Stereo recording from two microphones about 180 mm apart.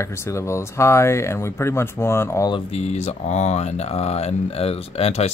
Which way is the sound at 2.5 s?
35° left (ahead or behind).